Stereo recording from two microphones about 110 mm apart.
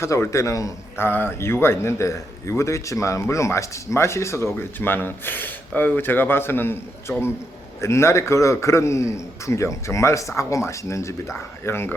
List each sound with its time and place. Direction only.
0.0 s a man's voice: 25° left (ahead or behind)
7.8 s a man's voice: 25° left (ahead or behind)